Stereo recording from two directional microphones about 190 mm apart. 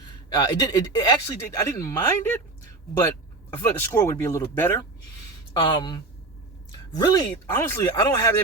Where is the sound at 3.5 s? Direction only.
15° left (ahead or behind).